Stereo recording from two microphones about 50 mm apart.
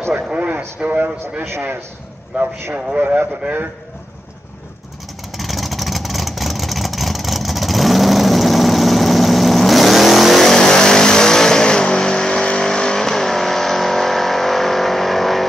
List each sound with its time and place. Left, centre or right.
0.1 s speech: right
2.3 s speech: right
3.0 s speech: right
5.3 s vehicle: centre